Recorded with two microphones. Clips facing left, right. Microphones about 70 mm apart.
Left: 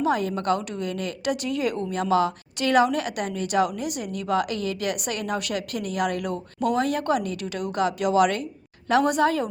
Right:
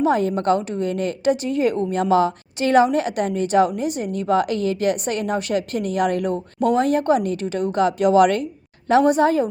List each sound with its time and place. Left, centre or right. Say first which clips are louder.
0.0 s a woman's voice: right 5 dB; right
8.9 s a woman's voice: right 5 dB; right